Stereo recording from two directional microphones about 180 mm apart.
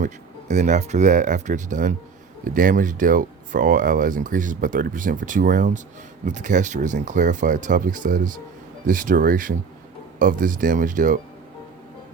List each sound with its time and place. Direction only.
0.0 s speech: 40° right (ahead or behind)